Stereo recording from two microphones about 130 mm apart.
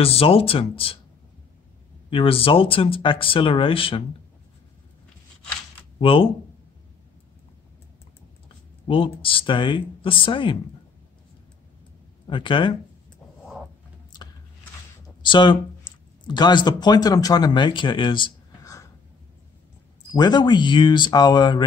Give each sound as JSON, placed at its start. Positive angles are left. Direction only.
{"t": 0.0, "sound": "speech", "side_deg": 50}
{"t": 2.0, "sound": "speech", "side_deg": 45}
{"t": 5.9, "sound": "speech", "side_deg": 45}
{"t": 8.8, "sound": "speech", "side_deg": 45}
{"t": 12.3, "sound": "speech", "side_deg": 40}
{"t": 15.2, "sound": "speech", "side_deg": 35}
{"t": 18.6, "sound": "a sound", "side_deg": 25}
{"t": 20.1, "sound": "speech", "side_deg": 30}